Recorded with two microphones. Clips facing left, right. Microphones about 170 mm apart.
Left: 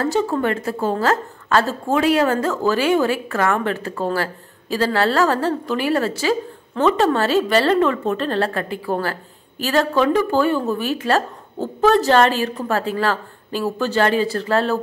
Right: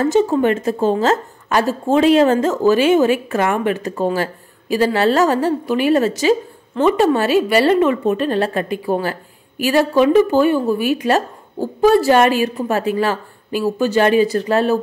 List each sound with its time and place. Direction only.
0.0 s a woman's voice: 20° right (ahead or behind)